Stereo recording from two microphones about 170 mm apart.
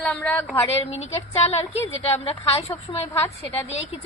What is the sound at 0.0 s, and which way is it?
Speech, 10° left (ahead or behind).